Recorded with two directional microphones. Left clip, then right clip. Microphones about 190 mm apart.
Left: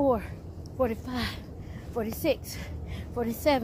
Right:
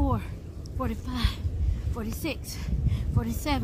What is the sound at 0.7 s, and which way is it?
A woman's voice, 25° right (ahead or behind).